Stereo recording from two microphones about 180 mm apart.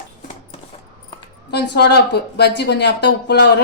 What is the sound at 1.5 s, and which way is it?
Speech, 70° left (ahead or behind).